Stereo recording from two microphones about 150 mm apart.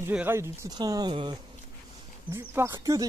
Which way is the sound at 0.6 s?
25° right (ahead or behind).